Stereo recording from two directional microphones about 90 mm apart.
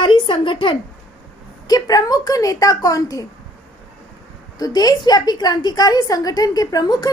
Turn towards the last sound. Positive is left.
turn(degrees=45)  # may be behind; listen again after turning